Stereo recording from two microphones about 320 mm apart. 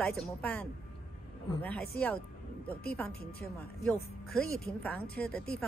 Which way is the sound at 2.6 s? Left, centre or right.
Centre.